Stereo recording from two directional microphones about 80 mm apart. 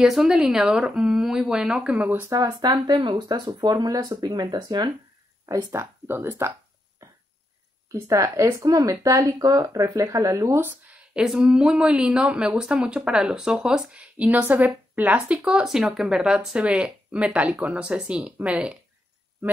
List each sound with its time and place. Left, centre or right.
0.0 s speech: centre
2.3 s speech: right
5.7 s speech: right
7.9 s speech: right
11.1 s speech: centre
15.3 s speech: centre